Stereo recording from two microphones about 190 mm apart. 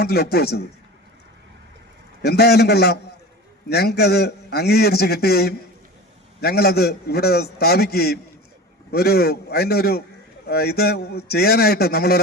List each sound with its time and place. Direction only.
0.0 s a man's voice: 55° left (ahead or behind)
2.2 s a man's voice: 60° left (ahead or behind)